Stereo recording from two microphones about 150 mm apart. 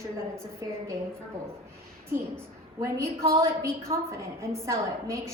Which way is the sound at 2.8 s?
20° right (ahead or behind).